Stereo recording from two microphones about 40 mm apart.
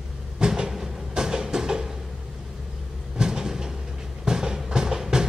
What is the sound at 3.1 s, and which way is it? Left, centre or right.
Train, centre.